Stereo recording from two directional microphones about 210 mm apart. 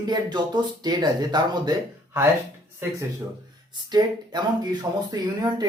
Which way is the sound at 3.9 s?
20° right (ahead or behind).